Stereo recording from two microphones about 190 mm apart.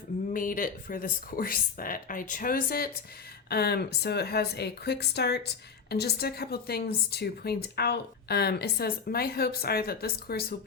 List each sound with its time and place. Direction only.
0.3 s a woman's voice: 45° left (ahead or behind)